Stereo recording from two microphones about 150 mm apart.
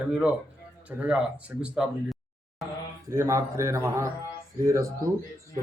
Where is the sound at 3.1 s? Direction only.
20° right (ahead or behind).